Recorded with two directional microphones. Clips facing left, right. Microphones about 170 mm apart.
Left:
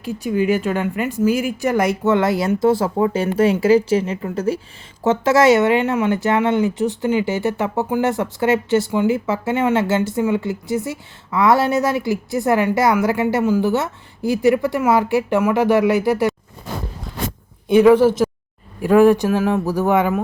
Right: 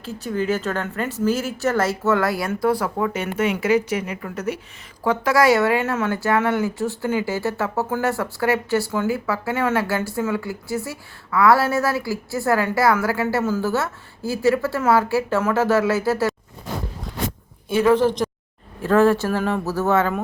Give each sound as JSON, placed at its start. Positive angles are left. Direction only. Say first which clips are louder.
{"t": 0.0, "sound": "speech", "louder": "left 5 dB", "side_deg": 15}
{"t": 17.7, "sound": "speech", "louder": "left 6 dB", "side_deg": 15}